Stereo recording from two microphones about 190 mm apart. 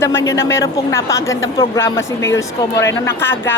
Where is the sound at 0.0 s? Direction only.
15° left (ahead or behind).